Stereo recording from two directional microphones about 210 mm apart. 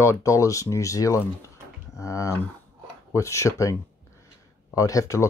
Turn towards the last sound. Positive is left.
turn(degrees=15)  # may be behind; listen again after turning